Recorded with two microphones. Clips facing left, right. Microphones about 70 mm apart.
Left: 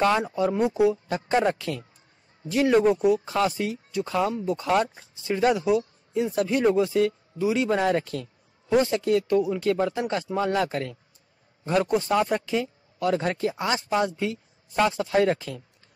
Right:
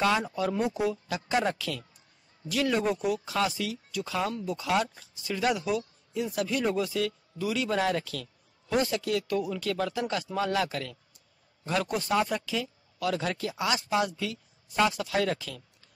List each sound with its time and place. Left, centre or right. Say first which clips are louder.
0.3 s speech: left 5 dB; left
1.0 s speech: left 5 dB; left